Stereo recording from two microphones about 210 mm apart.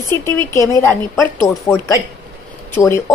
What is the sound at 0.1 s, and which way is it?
Speech, 10° left (ahead or behind).